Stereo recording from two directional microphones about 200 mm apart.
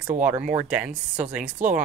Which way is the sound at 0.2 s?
5° right (ahead or behind).